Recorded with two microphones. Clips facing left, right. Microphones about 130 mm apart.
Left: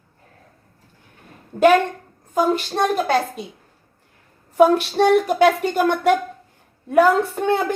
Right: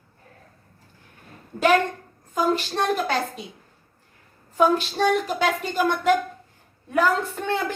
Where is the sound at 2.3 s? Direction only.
45° left (ahead or behind).